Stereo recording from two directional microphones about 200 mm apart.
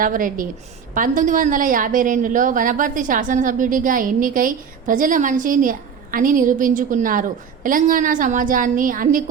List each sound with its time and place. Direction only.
0.0 s a woman's voice: 45° right (ahead or behind)